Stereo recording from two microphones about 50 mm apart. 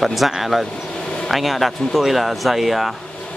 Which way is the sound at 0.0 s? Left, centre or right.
Centre.